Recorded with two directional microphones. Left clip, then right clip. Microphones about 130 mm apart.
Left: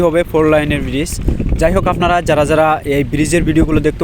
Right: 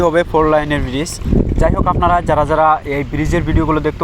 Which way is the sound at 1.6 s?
90° left.